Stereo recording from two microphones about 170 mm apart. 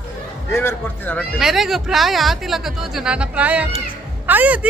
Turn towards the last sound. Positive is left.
turn(degrees=-10)  # may be behind; listen again after turning